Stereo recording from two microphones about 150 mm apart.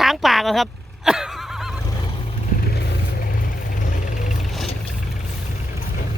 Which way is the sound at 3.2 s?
70° left (ahead or behind).